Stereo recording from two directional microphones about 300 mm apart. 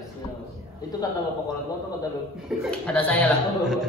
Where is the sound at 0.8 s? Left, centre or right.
Centre.